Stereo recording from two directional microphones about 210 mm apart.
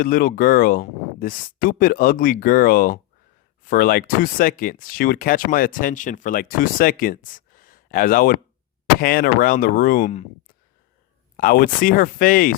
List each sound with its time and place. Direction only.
0.0 s speech: 40° left (ahead or behind)
11.3 s speech: 40° left (ahead or behind)